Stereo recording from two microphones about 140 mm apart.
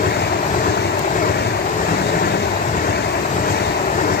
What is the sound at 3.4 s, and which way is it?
Vehicle, 80° left.